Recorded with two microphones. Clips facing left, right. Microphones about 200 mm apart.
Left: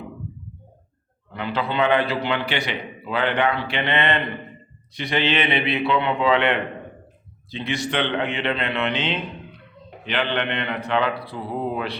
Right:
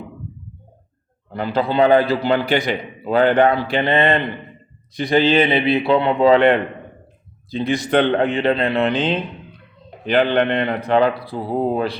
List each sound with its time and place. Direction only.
1.3 s a man's voice: 40° right (ahead or behind)